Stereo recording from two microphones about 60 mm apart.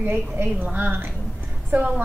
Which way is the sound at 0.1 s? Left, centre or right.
Right.